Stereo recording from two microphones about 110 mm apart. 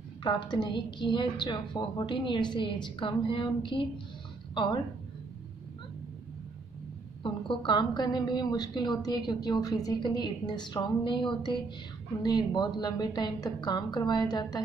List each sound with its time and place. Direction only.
0.2 s a woman's voice: 45° left (ahead or behind)
7.2 s a woman's voice: 45° left (ahead or behind)